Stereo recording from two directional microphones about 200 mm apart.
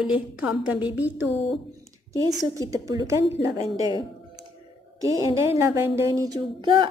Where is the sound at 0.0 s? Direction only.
5° right (ahead or behind).